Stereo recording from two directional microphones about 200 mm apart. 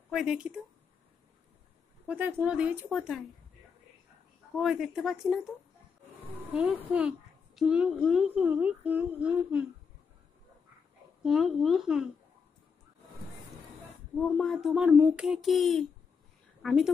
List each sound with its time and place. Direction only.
0.1 s speech: 5° right (ahead or behind)
2.0 s speech: 10° right (ahead or behind)
4.6 s a child's voice: centre (ahead or behind)
6.5 s a child's voice: 5° right (ahead or behind)
11.2 s a child's voice: centre (ahead or behind)
14.1 s a child's voice: centre (ahead or behind)